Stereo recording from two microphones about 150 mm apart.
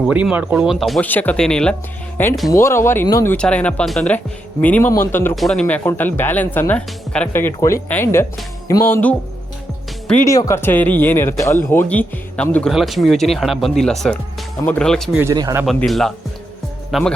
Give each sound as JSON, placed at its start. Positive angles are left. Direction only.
{"t": 0.1, "sound": "speech", "side_deg": -10}
{"t": 1.0, "sound": "speech", "side_deg": 10}
{"t": 2.5, "sound": "speech", "side_deg": 20}
{"t": 5.3, "sound": "speech", "side_deg": 0}
{"t": 10.2, "sound": "speech", "side_deg": 20}
{"t": 15.3, "sound": "speech", "side_deg": -25}
{"t": 15.6, "sound": "speech", "side_deg": 0}